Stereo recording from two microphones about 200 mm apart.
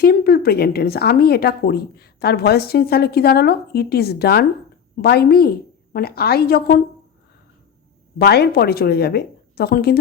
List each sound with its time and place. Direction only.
0.0 s speech: 50° left (ahead or behind)
8.2 s speech: 55° left (ahead or behind)